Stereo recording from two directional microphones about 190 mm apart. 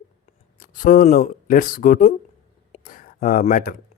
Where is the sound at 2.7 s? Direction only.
45° left (ahead or behind).